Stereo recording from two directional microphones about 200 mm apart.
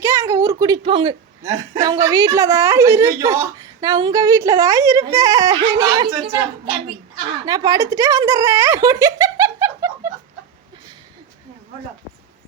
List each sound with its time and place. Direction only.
0.0 s a woman's voice: 15° right (ahead or behind)
7.4 s speech: 20° right (ahead or behind)